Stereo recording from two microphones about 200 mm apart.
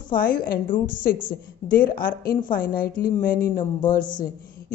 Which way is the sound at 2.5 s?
45° left (ahead or behind).